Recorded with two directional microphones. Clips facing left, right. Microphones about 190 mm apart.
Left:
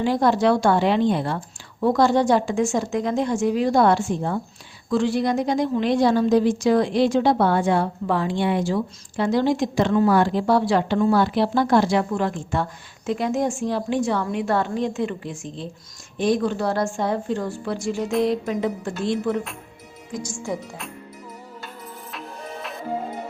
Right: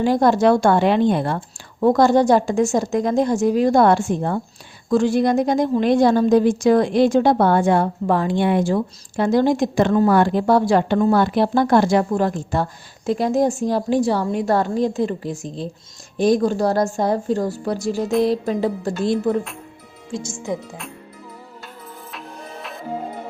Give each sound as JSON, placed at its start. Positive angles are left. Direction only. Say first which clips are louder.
{"t": 0.0, "sound": "a woman's voice", "louder": "right 3 dB", "side_deg": -45}
{"t": 20.1, "sound": "speech", "louder": "right 2 dB", "side_deg": -25}
{"t": 22.1, "sound": "music", "louder": "left 1 dB", "side_deg": 0}